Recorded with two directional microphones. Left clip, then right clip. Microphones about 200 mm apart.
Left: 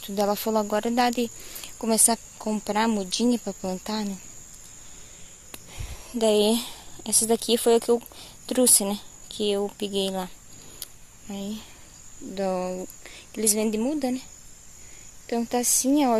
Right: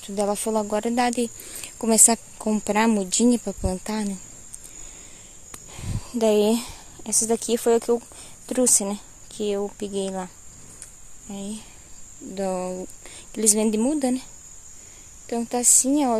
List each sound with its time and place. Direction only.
0.0 s speech: 5° right (ahead or behind)
5.7 s speech: 20° right (ahead or behind); by 10.3 s centre (ahead or behind)
10.8 s a sound: centre (ahead or behind)
12.4 s a woman's voice: 5° right (ahead or behind)
13.3 s a woman's voice: 15° right (ahead or behind)
15.2 s a woman's voice: 5° right (ahead or behind)